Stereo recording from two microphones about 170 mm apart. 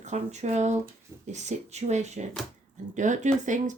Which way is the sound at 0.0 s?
40° right (ahead or behind).